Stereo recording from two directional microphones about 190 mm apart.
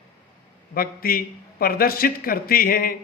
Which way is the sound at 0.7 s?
50° left (ahead or behind).